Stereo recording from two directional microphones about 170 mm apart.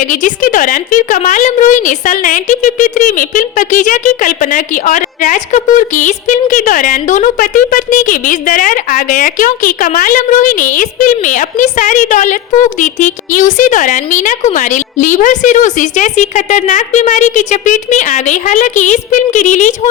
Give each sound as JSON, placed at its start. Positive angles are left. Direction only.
{"t": 0.0, "sound": "a woman's voice", "side_deg": 50}